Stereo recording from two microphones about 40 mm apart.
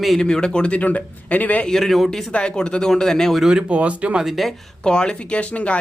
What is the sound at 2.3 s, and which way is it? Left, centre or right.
Speech, left.